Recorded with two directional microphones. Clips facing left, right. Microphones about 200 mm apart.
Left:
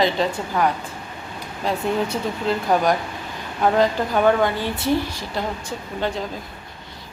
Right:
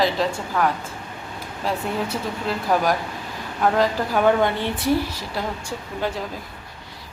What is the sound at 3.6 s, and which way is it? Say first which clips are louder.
Speech: left 2 dB; 5° left (ahead or behind).